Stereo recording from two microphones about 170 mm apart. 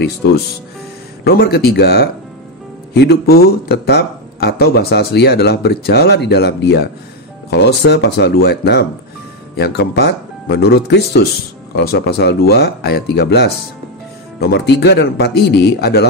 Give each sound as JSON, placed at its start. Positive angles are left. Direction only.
{"t": 1.2, "sound": "speech", "side_deg": 70}